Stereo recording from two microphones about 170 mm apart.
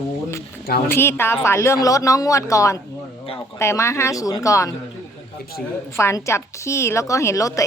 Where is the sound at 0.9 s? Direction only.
15° left (ahead or behind).